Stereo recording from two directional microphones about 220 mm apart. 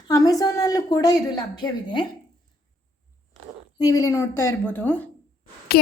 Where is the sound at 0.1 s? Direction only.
15° left (ahead or behind).